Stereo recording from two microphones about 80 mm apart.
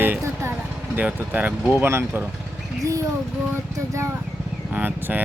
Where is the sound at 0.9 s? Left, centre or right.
Right.